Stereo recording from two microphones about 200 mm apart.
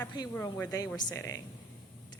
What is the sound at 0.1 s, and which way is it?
Speech, 20° left (ahead or behind).